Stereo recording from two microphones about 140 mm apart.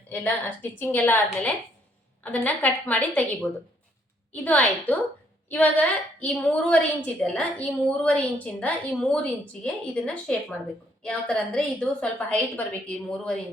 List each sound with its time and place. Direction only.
0.8 s a woman's voice: 10° left (ahead or behind)